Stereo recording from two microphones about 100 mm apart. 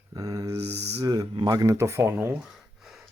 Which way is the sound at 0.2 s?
40° right (ahead or behind).